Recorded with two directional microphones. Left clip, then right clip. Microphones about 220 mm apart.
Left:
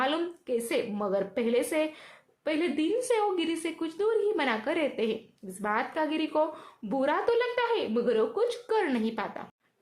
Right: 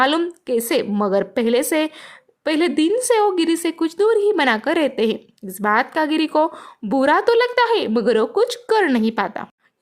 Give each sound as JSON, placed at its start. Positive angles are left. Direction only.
{"t": 0.0, "sound": "a woman's voice", "side_deg": -50}